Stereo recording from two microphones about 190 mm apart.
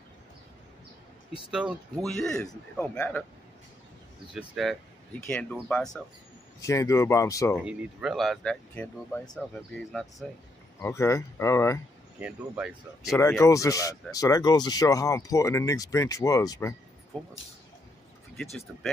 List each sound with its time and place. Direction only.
1.5 s speech: 5° right (ahead or behind)
4.3 s speech: centre (ahead or behind)
6.6 s speech: 15° left (ahead or behind)
7.5 s speech: centre (ahead or behind)
10.8 s speech: 15° left (ahead or behind)
12.2 s speech: 5° right (ahead or behind)
13.4 s speech: 15° left (ahead or behind)
17.1 s speech: 5° left (ahead or behind)